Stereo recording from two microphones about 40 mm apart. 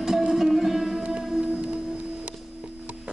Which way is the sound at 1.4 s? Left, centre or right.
Right.